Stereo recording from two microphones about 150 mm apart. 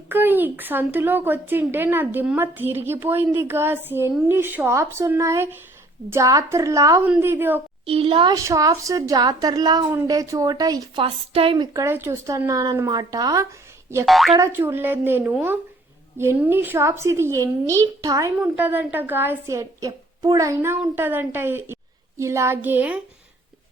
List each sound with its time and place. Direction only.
0.1 s a woman's voice: 15° right (ahead or behind)
7.9 s a woman's voice: 40° right (ahead or behind)
8.3 s a woman's voice: 20° right (ahead or behind)
11.0 s a woman's voice: 40° right (ahead or behind)
11.5 s a woman's voice: 25° right (ahead or behind)
14.0 s speech: centre (ahead or behind)
14.3 s a woman's voice: 15° right (ahead or behind)
18.5 s a woman's voice: 10° right (ahead or behind)